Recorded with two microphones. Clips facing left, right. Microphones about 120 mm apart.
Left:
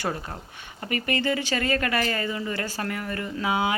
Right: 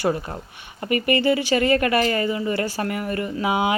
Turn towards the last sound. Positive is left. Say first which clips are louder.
# right 4 dB
turn(degrees=-15)  # may be behind; listen again after turning